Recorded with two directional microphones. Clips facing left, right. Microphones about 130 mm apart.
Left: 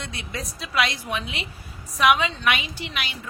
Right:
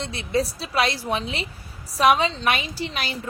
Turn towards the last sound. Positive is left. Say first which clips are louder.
# right 4 dB
turn(degrees=-35)  # may be behind; listen again after turning